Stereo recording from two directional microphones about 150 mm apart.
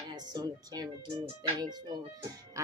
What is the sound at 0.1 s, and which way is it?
Speech, 25° right (ahead or behind).